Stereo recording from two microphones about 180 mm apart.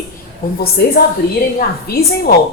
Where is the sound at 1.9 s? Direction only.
60° left (ahead or behind).